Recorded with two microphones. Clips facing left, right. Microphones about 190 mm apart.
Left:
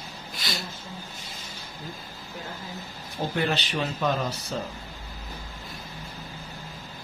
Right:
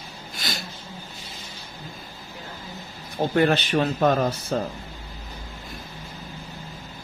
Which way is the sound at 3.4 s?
50° right (ahead or behind).